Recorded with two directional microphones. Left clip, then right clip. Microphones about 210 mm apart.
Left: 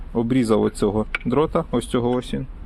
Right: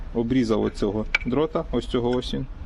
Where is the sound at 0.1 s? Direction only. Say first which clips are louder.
Left 3 dB; 25° left (ahead or behind).